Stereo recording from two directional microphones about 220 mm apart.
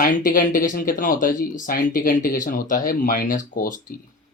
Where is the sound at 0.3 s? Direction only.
40° left (ahead or behind).